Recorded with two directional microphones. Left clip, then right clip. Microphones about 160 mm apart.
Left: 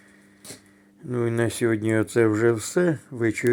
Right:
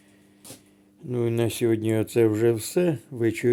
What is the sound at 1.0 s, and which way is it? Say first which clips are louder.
Speech: left 1 dB; 15° right (ahead or behind).